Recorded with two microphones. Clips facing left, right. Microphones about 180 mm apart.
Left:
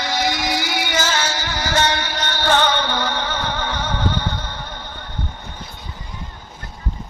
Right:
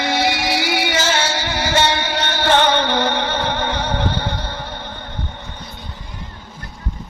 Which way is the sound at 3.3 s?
30° right (ahead or behind).